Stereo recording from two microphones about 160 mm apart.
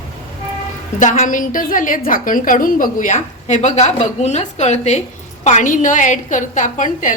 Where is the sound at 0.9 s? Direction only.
50° left (ahead or behind).